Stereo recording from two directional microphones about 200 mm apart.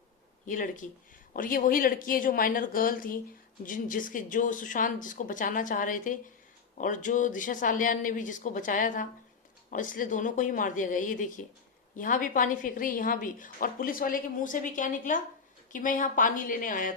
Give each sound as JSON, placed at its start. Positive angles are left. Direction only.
{"t": 0.4, "sound": "a woman's voice", "side_deg": 40}